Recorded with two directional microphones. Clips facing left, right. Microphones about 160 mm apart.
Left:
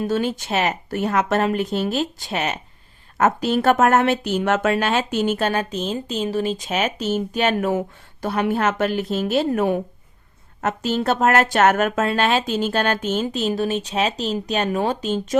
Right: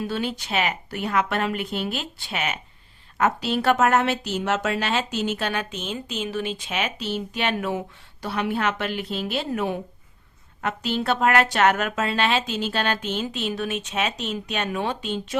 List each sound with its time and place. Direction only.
0.0 s speech: 45° left (ahead or behind)